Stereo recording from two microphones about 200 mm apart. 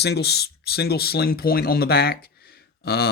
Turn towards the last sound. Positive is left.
turn(degrees=50)  # may be behind; listen again after turning